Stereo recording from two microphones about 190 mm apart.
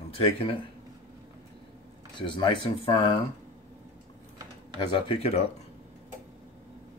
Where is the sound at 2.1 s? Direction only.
25° left (ahead or behind).